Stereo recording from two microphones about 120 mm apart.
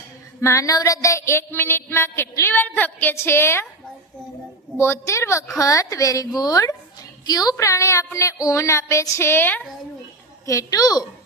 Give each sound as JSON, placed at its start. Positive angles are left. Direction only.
{"t": 0.4, "sound": "music", "side_deg": 25}
{"t": 4.8, "sound": "music", "side_deg": 25}
{"t": 10.4, "sound": "a woman's voice", "side_deg": 25}